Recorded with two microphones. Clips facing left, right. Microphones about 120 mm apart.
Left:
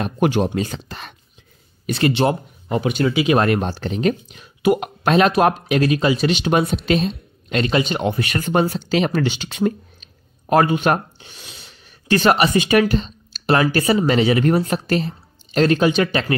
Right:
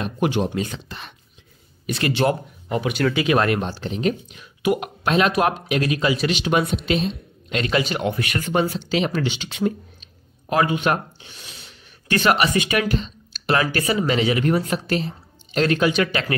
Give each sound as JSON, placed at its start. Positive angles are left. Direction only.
{"t": 0.0, "sound": "speech", "side_deg": 45}
{"t": 1.9, "sound": "speech", "side_deg": 30}
{"t": 3.3, "sound": "speech", "side_deg": 35}
{"t": 4.3, "sound": "speech", "side_deg": 35}
{"t": 7.5, "sound": "speech", "side_deg": 30}